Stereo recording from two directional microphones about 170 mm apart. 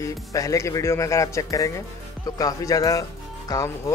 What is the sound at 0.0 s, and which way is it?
Speech, 20° left (ahead or behind).